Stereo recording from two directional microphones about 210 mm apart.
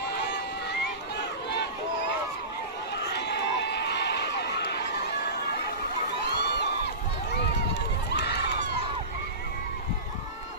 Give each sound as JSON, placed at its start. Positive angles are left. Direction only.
{"t": 3.0, "sound": "run", "side_deg": 50}
{"t": 6.3, "sound": "crowd", "side_deg": 50}
{"t": 7.7, "sound": "run", "side_deg": 55}